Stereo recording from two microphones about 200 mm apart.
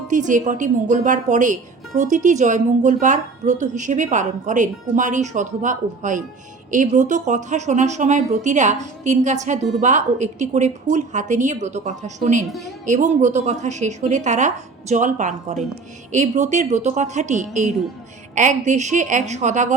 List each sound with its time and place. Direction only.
0.1 s a woman's voice: 40° right (ahead or behind)